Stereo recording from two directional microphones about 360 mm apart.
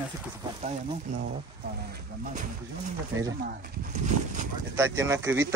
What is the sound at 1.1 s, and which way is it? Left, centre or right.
Speech, centre.